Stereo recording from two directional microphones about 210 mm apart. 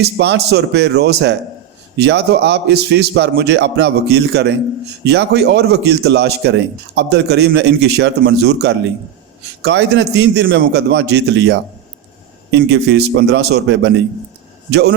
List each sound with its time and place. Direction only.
0.0 s a man's voice: 55° right (ahead or behind)